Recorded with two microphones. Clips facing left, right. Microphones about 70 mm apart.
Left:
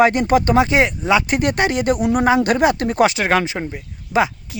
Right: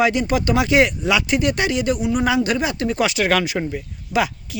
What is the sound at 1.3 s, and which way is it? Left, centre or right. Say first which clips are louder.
Speech: left 1 dB; left.